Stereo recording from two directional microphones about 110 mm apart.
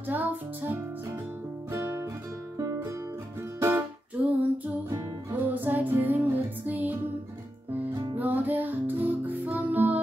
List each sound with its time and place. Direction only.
0.1 s music: 15° right (ahead or behind)
3.5 s music: 25° right (ahead or behind)
4.2 s female singing: 15° right (ahead or behind)
5.3 s music: 15° right (ahead or behind)
7.9 s music: 40° right (ahead or behind)
8.2 s music: 15° right (ahead or behind)